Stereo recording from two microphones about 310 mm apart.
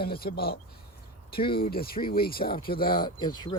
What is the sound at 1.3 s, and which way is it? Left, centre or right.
Speech, centre.